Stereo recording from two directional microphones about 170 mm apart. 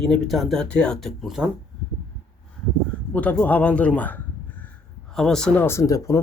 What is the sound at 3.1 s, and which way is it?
Speech, 10° left (ahead or behind).